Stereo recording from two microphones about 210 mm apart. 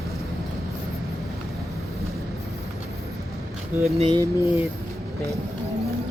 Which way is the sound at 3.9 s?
30° right (ahead or behind).